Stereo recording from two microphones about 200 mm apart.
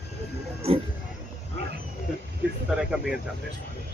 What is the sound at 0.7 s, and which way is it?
Speech, 30° right (ahead or behind).